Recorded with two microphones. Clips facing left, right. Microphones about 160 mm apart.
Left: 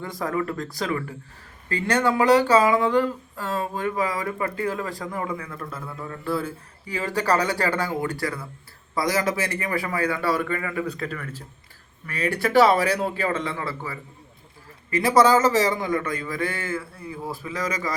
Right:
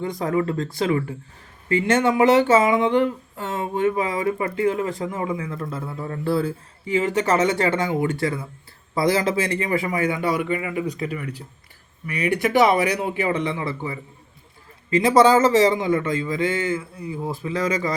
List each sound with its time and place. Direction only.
0.0 s a man's voice: 20° right (ahead or behind)